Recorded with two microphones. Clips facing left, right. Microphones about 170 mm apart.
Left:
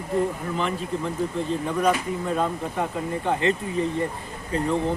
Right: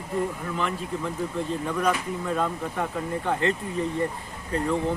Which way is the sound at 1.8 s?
15° left (ahead or behind).